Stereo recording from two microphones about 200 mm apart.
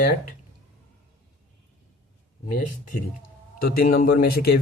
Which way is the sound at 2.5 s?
40° left (ahead or behind).